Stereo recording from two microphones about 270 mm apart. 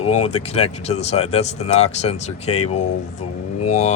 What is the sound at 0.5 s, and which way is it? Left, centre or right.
Speech, left.